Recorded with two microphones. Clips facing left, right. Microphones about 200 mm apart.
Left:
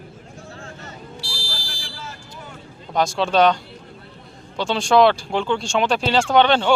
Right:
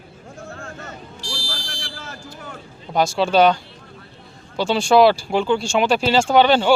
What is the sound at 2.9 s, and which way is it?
Speech, 5° right (ahead or behind).